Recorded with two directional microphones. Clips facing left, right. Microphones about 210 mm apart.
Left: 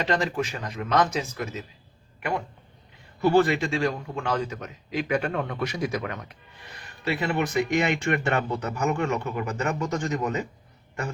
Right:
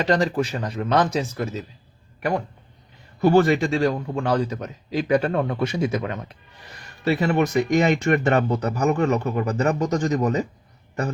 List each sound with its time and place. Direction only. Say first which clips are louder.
0.1 s speech: right 5 dB; 35° right (ahead or behind)
3.2 s speech: right 4 dB; 45° right (ahead or behind); by 6.3 s 25° right (ahead or behind)
7.1 s speech: right 6 dB; 40° right (ahead or behind)